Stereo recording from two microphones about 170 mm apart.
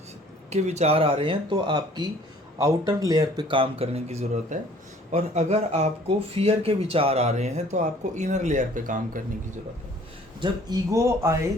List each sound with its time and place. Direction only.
0.5 s speech: 40° right (ahead or behind)
10.4 s speech: 20° right (ahead or behind)